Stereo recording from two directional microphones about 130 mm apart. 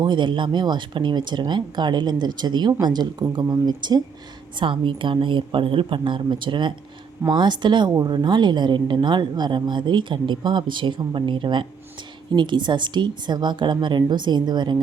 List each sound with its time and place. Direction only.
0.0 s a woman's voice: 35° right (ahead or behind)